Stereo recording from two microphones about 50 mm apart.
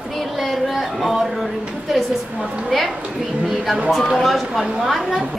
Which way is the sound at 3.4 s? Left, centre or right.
Centre.